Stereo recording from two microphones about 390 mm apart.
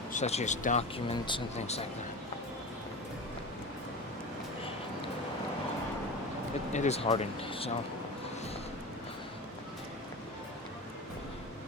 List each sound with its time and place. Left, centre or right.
0.1 s speech: centre
6.7 s speech: centre